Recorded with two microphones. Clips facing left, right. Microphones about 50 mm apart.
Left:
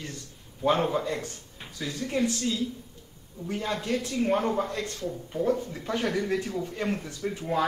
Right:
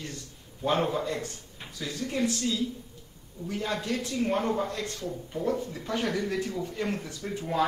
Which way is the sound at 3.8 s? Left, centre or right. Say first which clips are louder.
Left 5 dB; left.